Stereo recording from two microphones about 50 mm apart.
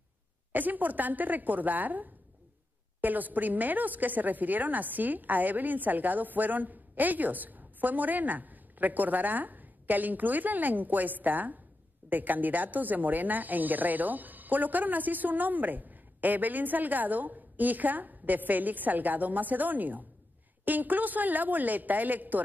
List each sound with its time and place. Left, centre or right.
0.5 s a woman's voice: right